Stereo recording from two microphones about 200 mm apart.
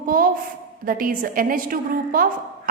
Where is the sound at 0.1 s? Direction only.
45° right (ahead or behind).